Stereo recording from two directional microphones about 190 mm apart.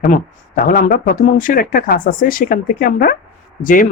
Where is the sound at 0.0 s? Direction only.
45° left (ahead or behind).